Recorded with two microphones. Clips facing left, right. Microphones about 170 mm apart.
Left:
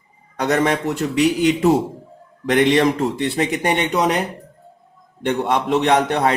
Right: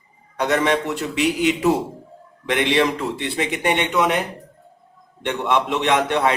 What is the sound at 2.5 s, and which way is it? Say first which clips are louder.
A man's voice: left 4 dB; 50° left (ahead or behind).